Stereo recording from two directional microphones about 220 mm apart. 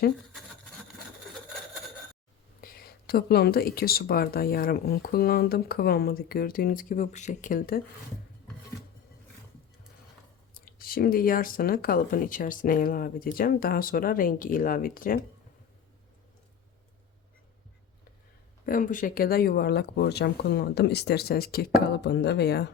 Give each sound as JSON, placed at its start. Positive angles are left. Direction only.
{"t": 2.6, "sound": "speech", "side_deg": 40}
{"t": 10.5, "sound": "speech", "side_deg": 40}
{"t": 18.6, "sound": "speech", "side_deg": 40}